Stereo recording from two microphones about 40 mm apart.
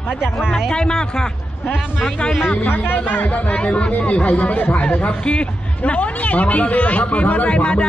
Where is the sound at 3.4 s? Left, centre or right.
Left.